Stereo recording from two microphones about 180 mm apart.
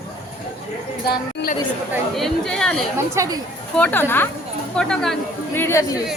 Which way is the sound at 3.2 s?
20° right (ahead or behind).